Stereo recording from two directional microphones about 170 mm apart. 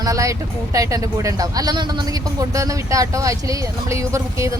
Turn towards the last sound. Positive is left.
turn(degrees=-20)  # may be behind; listen again after turning